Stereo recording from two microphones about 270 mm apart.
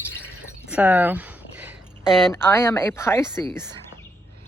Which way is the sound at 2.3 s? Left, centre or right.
Centre.